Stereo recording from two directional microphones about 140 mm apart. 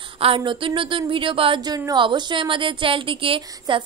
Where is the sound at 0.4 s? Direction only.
35° right (ahead or behind).